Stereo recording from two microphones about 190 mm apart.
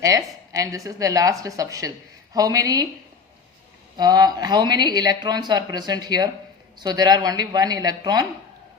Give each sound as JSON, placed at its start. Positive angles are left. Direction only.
{"t": 0.0, "sound": "speech", "side_deg": -20}
{"t": 3.9, "sound": "speech", "side_deg": -20}